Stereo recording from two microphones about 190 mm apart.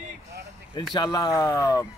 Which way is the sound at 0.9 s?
20° left (ahead or behind).